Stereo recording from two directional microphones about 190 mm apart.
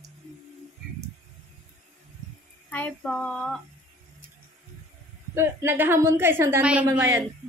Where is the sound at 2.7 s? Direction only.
5° left (ahead or behind).